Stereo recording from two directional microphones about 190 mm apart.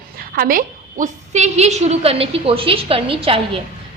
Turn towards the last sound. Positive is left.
turn(degrees=-30)  # may be behind; listen again after turning